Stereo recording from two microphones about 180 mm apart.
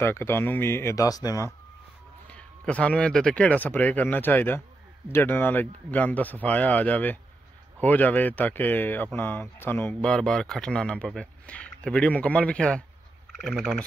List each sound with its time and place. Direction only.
0.0 s speech: 15° left (ahead or behind)
2.2 s speech: 5° left (ahead or behind)